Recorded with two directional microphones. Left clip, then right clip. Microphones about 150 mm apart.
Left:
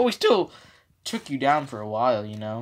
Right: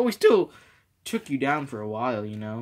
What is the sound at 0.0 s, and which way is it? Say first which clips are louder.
Speech: even; 10° left (ahead or behind).